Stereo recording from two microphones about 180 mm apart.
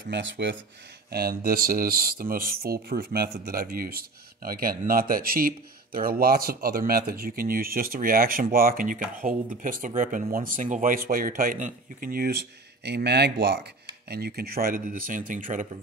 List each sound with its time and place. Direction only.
0.1 s speech: 80° right
1.1 s speech: 55° right (ahead or behind)